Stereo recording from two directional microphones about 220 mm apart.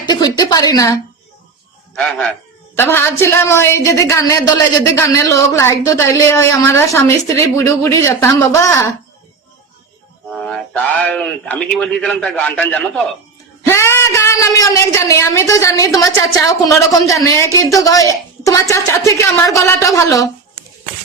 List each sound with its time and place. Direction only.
0.0 s a woman's voice: 20° left (ahead or behind)
2.0 s a man's voice: 5° left (ahead or behind)
10.3 s a man's voice: 5° left (ahead or behind)